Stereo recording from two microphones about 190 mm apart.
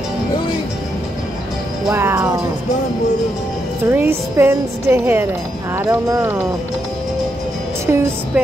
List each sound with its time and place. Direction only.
1.9 s a woman's voice: 15° right (ahead or behind)
3.8 s a woman's voice: 10° right (ahead or behind)
7.8 s a woman's voice: 15° right (ahead or behind)